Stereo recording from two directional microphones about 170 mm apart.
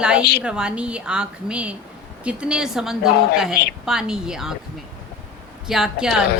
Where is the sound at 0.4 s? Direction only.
5° right (ahead or behind).